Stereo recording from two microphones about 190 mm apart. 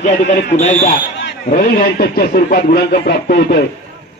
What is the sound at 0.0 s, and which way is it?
Speech, 40° left (ahead or behind).